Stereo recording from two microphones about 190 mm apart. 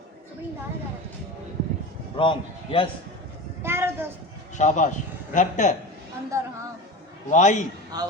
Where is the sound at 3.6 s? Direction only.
15° right (ahead or behind).